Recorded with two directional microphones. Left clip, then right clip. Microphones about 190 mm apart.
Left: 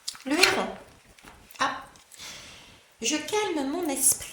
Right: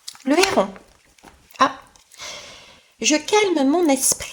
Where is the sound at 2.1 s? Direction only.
35° right (ahead or behind).